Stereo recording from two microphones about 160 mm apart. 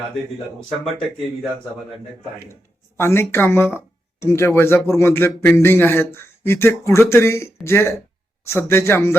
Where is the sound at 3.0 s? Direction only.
15° left (ahead or behind).